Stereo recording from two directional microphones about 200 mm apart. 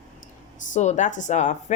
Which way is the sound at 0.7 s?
35° left (ahead or behind).